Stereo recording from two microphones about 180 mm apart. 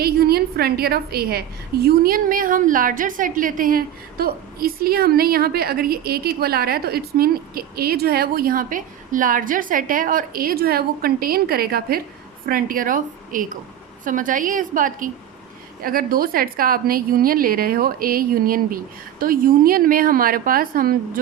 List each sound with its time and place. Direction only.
0.0 s a woman's voice: 60° right (ahead or behind)